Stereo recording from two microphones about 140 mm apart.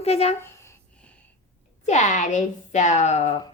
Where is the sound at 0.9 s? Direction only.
10° left (ahead or behind).